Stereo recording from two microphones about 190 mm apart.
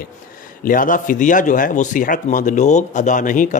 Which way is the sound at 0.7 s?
45° left (ahead or behind).